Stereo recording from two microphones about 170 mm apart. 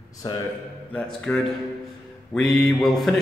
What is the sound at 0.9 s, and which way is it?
A man's voice, 5° left (ahead or behind).